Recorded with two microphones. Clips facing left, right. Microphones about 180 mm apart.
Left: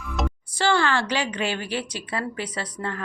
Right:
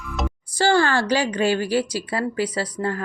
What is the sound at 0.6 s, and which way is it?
Speech, 40° right (ahead or behind).